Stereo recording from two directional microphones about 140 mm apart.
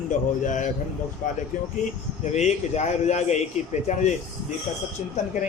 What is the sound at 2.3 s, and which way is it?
Speech, 55° left (ahead or behind).